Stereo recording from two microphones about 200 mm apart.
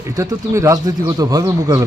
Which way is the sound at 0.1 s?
15° right (ahead or behind).